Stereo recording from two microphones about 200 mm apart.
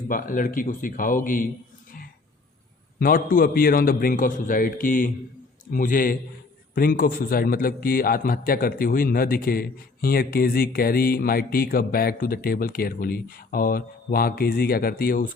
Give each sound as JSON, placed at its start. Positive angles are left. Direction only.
{"t": 0.1, "sound": "a man's voice", "side_deg": 45}
{"t": 3.0, "sound": "a man's voice", "side_deg": 45}